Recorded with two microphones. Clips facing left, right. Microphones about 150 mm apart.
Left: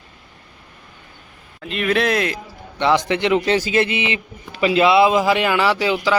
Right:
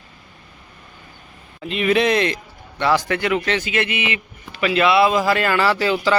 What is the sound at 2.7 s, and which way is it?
A man's voice, 20° left (ahead or behind).